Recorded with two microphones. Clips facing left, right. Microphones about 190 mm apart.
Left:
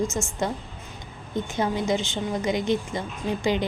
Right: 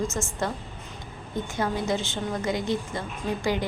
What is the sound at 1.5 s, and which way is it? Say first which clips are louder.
A woman's voice: left 2 dB; 20° left (ahead or behind).